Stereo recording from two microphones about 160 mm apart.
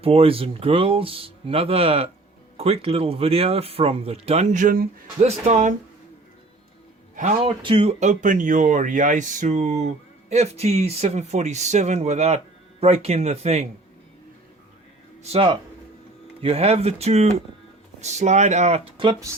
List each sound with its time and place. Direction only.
0.0 s speech: 35° right (ahead or behind); by 4.9 s 60° right (ahead or behind)
5.2 s speech: 50° right (ahead or behind)
7.4 s speech: 35° right (ahead or behind)
15.2 s speech: 35° right (ahead or behind)
19.3 s speech: 20° right (ahead or behind)